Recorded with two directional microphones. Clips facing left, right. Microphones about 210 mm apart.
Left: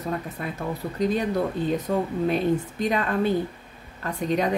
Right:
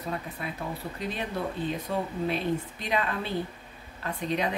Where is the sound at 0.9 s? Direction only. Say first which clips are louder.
Left 11 dB; 40° left (ahead or behind).